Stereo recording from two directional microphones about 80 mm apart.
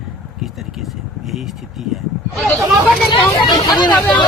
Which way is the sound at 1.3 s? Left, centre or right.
Centre.